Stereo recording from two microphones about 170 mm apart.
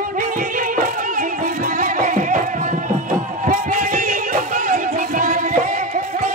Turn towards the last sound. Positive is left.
turn(degrees=-55)  # may be behind; listen again after turning